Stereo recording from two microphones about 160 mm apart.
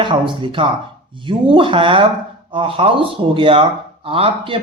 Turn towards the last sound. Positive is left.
turn(degrees=-35)  # may be behind; listen again after turning